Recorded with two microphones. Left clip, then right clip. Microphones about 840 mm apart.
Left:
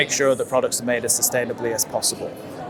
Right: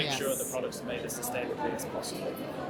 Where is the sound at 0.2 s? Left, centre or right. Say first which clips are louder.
Left 14 dB; left.